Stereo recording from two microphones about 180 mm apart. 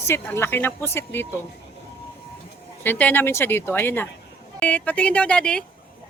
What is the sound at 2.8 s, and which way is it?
Speech, 10° left (ahead or behind).